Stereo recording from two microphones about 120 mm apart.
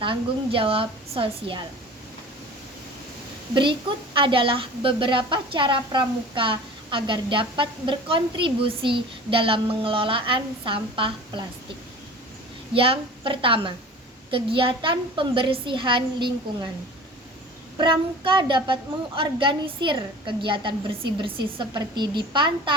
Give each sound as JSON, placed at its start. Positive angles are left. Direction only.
{"t": 0.0, "sound": "a woman's voice", "side_deg": -45}
{"t": 3.5, "sound": "a woman's voice", "side_deg": -45}
{"t": 12.7, "sound": "a woman's voice", "side_deg": -50}
{"t": 17.7, "sound": "a woman's voice", "side_deg": -40}